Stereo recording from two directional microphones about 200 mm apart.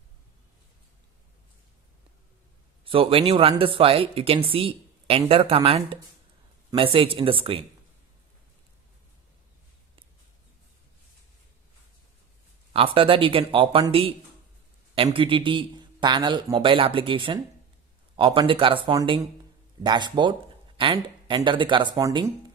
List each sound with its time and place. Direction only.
2.8 s speech: 25° right (ahead or behind)
12.7 s speech: 25° right (ahead or behind)
15.0 s speech: 25° right (ahead or behind)